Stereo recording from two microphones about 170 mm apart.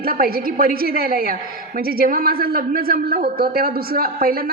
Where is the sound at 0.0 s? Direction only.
60° right (ahead or behind).